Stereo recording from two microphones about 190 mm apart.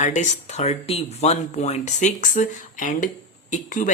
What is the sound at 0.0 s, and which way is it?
Speech, 40° left (ahead or behind).